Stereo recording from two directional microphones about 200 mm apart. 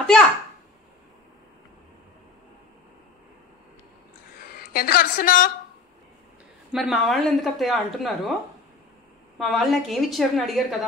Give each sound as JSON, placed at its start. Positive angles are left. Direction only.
{"t": 4.5, "sound": "a woman's voice", "side_deg": 45}
{"t": 6.7, "sound": "speech", "side_deg": 0}
{"t": 9.4, "sound": "speech", "side_deg": 0}